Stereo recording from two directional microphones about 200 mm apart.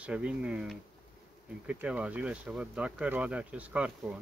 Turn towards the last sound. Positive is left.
turn(degrees=-5)  # may be behind; listen again after turning